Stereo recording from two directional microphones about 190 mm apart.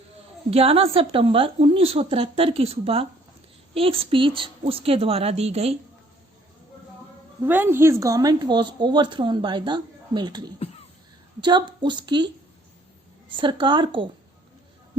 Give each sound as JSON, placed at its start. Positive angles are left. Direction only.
{"t": 0.5, "sound": "a woman's voice", "side_deg": -30}
{"t": 7.4, "sound": "a woman's voice", "side_deg": -10}
{"t": 13.3, "sound": "a woman's voice", "side_deg": -25}